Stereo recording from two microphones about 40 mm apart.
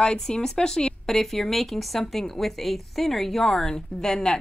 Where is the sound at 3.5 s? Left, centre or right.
Centre.